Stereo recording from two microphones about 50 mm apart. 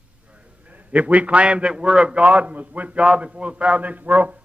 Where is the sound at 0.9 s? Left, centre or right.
Right.